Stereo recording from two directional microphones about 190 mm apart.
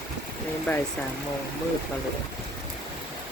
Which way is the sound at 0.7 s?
5° left (ahead or behind).